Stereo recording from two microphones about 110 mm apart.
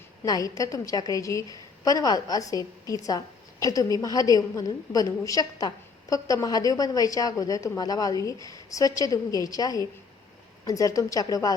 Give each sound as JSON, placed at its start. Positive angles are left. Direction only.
{"t": 0.3, "sound": "a woman's voice", "side_deg": 30}